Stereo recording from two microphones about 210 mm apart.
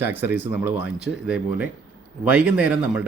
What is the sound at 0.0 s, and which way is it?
Speech, 10° right (ahead or behind).